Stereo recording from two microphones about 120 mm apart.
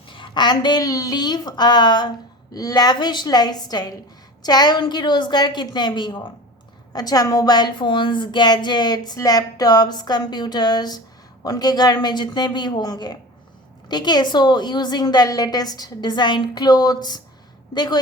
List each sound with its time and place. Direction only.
0.0 s a woman's voice: 45° left (ahead or behind)